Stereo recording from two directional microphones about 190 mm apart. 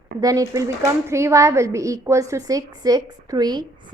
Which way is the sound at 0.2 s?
20° right (ahead or behind).